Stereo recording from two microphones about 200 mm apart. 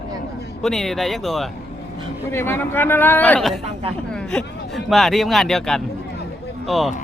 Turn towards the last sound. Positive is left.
turn(degrees=0)  # may be behind; listen again after turning